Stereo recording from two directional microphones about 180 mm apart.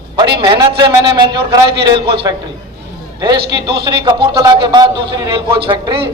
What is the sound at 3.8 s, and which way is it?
A man's voice, 25° right (ahead or behind).